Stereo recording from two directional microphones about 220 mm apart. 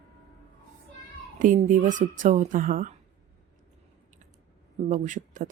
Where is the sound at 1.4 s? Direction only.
35° right (ahead or behind).